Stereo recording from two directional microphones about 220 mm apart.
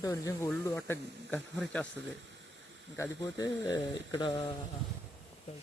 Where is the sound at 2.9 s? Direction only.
15° left (ahead or behind).